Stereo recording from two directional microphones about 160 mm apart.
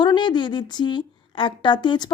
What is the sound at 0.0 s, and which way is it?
A woman's voice, 30° left (ahead or behind).